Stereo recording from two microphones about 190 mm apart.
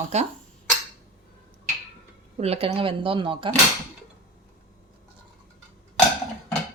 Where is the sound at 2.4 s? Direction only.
30° right (ahead or behind).